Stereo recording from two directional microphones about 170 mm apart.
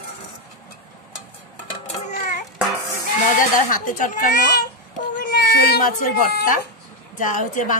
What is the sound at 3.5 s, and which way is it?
A child's voice, 50° left (ahead or behind).